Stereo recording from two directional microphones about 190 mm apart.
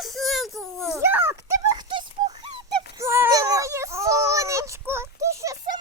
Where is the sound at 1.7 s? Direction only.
25° right (ahead or behind).